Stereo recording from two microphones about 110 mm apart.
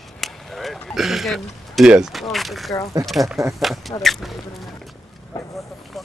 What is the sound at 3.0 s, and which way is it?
Speech, centre (ahead or behind).